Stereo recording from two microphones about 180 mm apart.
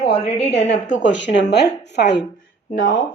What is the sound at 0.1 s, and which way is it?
Speech, 35° left (ahead or behind).